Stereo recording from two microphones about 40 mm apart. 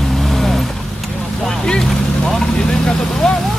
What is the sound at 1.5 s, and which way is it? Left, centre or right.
Speech, centre.